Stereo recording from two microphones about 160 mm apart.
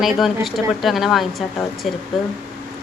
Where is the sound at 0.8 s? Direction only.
Centre (ahead or behind).